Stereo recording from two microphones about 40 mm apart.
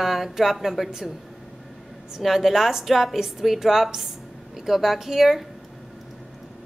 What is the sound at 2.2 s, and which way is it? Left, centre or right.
A woman's voice, centre.